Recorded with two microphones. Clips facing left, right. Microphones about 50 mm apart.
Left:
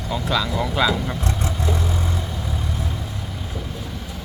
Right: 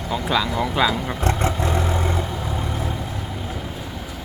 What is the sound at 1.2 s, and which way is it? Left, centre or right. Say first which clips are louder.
Vehicle: right 4 dB; right.